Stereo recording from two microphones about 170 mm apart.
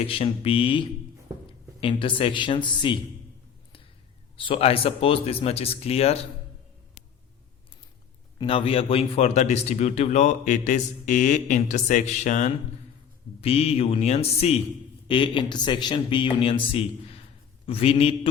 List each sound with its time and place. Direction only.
0.0 s speech: 35° left (ahead or behind)
4.4 s speech: 30° left (ahead or behind)
8.4 s speech: 30° left (ahead or behind)